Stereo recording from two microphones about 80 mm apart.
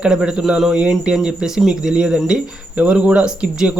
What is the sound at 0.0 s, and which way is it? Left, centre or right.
Speech, centre.